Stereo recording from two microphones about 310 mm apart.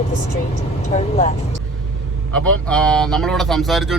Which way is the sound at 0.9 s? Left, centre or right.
Left.